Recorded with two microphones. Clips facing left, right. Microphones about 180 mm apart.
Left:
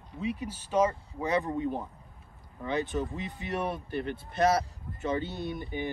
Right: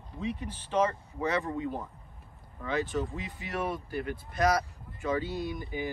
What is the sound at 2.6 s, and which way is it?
Speech, 20° left (ahead or behind).